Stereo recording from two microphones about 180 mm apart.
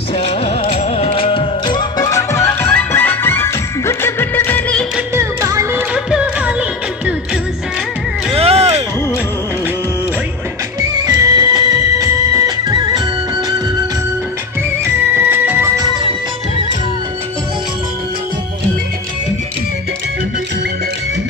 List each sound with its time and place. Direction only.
0.1 s music: 30° left (ahead or behind); by 4.8 s 10° left (ahead or behind)
4.9 s music: 15° right (ahead or behind)
5.9 s music: 5° right (ahead or behind)
8.3 s music: 35° right (ahead or behind)
10.8 s music: 20° right (ahead or behind)
15.2 s music: 10° right (ahead or behind)